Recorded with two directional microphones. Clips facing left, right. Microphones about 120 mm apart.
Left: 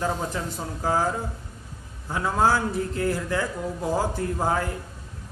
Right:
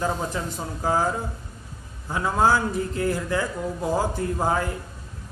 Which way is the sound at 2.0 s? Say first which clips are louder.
Right 1 dB; 20° right (ahead or behind).